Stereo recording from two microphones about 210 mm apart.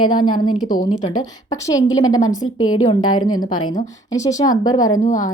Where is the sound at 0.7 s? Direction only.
35° left (ahead or behind).